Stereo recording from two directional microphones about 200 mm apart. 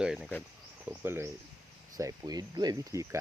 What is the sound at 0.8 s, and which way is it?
Speech, 10° right (ahead or behind).